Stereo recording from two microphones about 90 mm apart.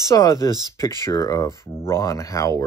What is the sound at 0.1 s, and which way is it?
Speech, 40° left (ahead or behind).